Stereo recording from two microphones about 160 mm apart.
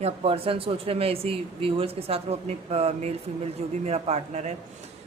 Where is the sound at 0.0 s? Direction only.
40° right (ahead or behind).